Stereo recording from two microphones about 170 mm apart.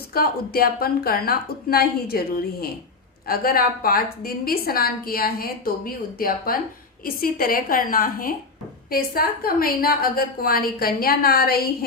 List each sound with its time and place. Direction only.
0.1 s a woman's voice: 60° left (ahead or behind)